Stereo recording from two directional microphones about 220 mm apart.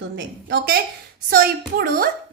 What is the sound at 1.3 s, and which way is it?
Speech, 45° right (ahead or behind).